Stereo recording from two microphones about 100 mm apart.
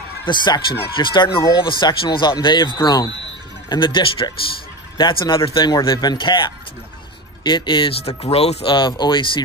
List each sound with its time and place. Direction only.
0.2 s speech: 50° left (ahead or behind)
8.2 s speech: 90° left
8.7 s speech: 50° left (ahead or behind)